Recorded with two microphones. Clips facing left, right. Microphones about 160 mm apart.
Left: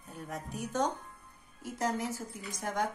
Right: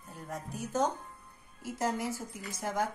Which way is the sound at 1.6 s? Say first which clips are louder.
Right 1 dB; 10° right (ahead or behind).